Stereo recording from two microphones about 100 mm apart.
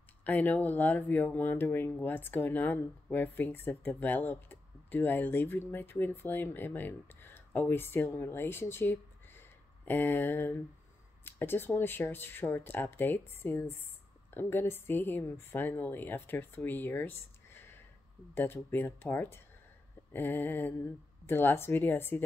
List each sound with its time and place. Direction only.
0.2 s speech: 15° left (ahead or behind)